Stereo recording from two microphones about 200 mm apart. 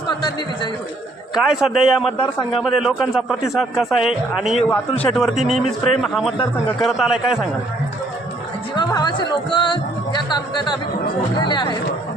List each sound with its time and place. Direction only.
0.1 s speech: 20° left (ahead or behind)
1.4 s a man's voice: 5° right (ahead or behind)
8.7 s speech: 20° left (ahead or behind)